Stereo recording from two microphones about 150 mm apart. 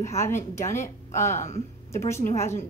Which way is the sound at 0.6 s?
55° left (ahead or behind).